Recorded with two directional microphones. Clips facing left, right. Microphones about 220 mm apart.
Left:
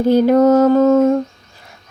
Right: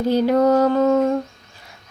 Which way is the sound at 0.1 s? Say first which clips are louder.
Left 5 dB; 50° left (ahead or behind).